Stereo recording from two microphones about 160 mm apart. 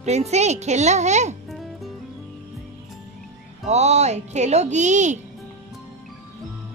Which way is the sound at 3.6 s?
45° right (ahead or behind).